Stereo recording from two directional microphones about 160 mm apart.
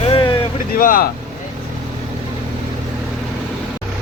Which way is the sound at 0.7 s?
60° left (ahead or behind).